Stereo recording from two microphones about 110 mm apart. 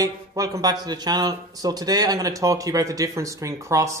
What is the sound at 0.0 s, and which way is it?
Speech, 35° right (ahead or behind).